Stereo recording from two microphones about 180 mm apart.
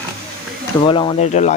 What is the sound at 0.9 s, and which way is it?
Speech, 25° left (ahead or behind).